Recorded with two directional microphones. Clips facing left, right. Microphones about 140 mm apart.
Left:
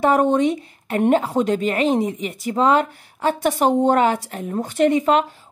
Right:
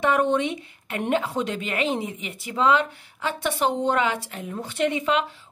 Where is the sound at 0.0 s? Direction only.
40° left (ahead or behind).